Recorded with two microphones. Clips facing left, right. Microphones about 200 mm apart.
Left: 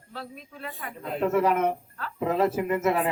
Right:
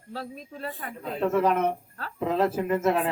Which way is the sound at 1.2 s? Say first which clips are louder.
Even; 10° left (ahead or behind).